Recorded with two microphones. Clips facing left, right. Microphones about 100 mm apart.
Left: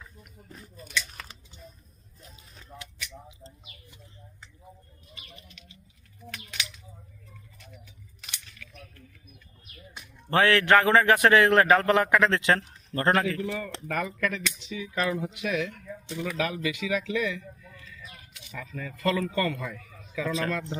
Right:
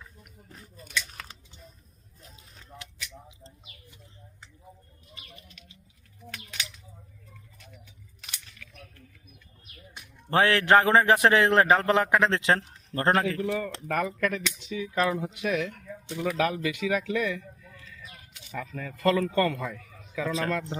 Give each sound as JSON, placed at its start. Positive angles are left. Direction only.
{"t": 3.4, "sound": "bird", "side_deg": 5}
{"t": 10.2, "sound": "a man's voice", "side_deg": -25}
{"t": 13.4, "sound": "a man's voice", "side_deg": -40}
{"t": 18.5, "sound": "a man's voice", "side_deg": -50}